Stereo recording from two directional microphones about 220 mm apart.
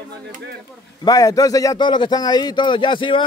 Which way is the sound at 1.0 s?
15° left (ahead or behind).